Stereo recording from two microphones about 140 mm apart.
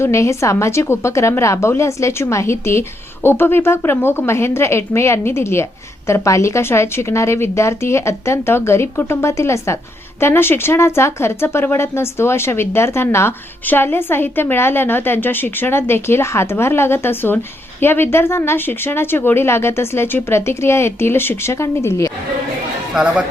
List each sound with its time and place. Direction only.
0.0 s speech: 20° left (ahead or behind)
23.0 s speech: 5° right (ahead or behind)